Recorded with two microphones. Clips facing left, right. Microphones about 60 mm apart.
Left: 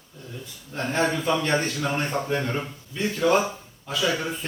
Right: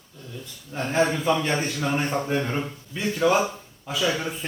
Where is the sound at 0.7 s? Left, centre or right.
Centre.